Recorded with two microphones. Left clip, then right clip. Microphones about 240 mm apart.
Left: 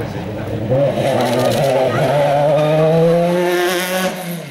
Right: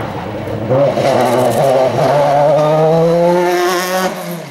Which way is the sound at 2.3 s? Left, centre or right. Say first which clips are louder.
Right 3 dB; centre.